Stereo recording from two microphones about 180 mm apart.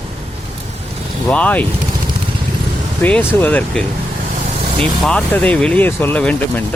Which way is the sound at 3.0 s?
10° left (ahead or behind).